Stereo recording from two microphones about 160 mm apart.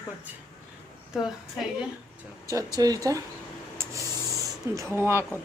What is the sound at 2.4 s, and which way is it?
Speech, 20° right (ahead or behind).